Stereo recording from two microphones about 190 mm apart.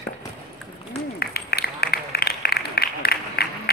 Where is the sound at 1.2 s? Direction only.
55° left (ahead or behind).